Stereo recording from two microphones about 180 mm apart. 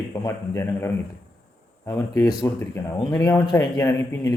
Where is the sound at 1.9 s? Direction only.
20° left (ahead or behind).